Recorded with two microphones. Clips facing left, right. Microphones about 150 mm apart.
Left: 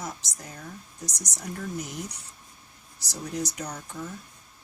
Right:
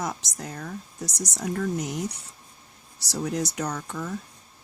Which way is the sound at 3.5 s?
75° right (ahead or behind).